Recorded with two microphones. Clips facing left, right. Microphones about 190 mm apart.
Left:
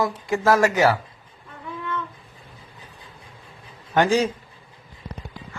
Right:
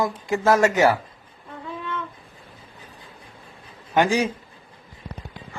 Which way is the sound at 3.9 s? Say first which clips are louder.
Left 1 dB; 15° right (ahead or behind).